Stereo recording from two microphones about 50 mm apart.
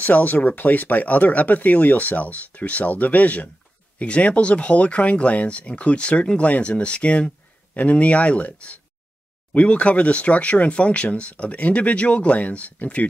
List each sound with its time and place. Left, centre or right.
0.0 s speech: left